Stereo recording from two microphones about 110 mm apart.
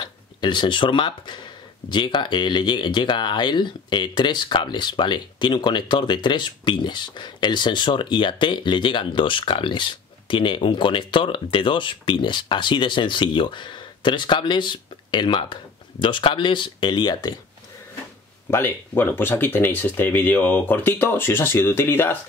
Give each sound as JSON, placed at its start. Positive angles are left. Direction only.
{"t": 0.0, "sound": "speech", "side_deg": 45}
{"t": 18.5, "sound": "speech", "side_deg": 20}